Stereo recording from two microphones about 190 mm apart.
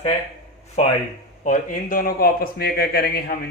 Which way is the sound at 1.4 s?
45° left (ahead or behind).